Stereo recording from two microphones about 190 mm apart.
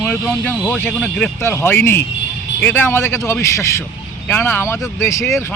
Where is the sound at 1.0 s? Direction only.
10° left (ahead or behind).